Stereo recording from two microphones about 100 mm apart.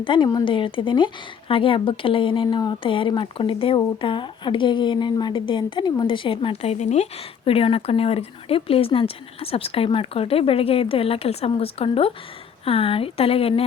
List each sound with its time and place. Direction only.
0.0 s a woman's voice: 55° left (ahead or behind)
4.0 s a woman's voice: 55° left (ahead or behind); by 13.7 s 70° left (ahead or behind)